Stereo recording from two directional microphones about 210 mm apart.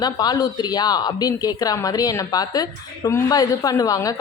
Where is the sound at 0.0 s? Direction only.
20° left (ahead or behind).